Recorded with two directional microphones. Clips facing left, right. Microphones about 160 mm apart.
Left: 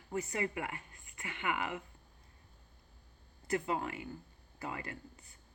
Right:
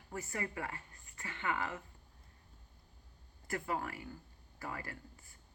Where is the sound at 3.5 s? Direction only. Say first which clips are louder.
Left 4 dB; 20° left (ahead or behind).